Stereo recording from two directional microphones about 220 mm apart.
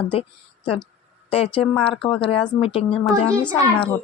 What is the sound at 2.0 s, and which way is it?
Speech, 25° left (ahead or behind).